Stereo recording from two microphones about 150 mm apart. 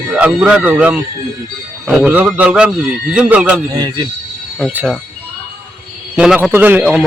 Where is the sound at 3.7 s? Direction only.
25° right (ahead or behind).